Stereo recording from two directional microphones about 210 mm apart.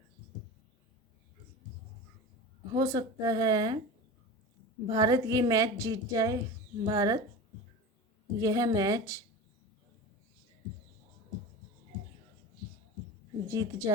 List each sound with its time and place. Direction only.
2.7 s speech: 15° right (ahead or behind)
4.9 s a woman's voice: 20° right (ahead or behind)
8.4 s a woman's voice: 15° right (ahead or behind)
13.5 s a woman's voice: 15° right (ahead or behind)